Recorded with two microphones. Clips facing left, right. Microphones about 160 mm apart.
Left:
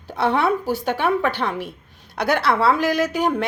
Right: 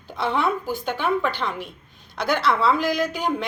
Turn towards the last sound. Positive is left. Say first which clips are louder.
# left 4 dB
turn(degrees=70)  # may be behind; listen again after turning